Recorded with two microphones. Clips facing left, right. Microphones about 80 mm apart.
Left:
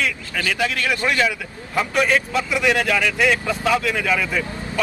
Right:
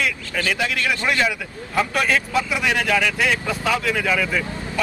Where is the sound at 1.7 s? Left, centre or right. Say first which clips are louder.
Left 1 dB; centre.